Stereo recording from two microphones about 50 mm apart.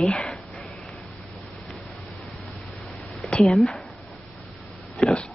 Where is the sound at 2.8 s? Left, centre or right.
Centre.